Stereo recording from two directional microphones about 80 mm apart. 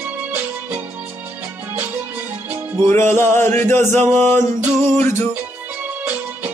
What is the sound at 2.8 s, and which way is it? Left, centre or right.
Music, left.